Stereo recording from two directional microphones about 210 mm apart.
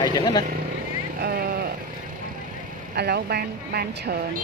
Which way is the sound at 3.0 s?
50° right (ahead or behind).